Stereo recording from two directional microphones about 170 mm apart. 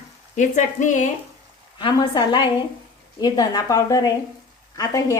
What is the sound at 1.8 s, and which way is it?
Speech, 25° left (ahead or behind).